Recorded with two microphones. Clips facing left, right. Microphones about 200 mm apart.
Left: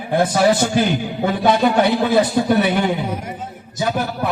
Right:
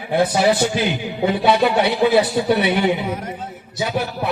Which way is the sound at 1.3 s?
45° left (ahead or behind).